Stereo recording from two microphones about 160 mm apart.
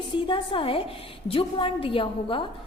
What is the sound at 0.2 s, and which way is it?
A woman's voice, 30° left (ahead or behind).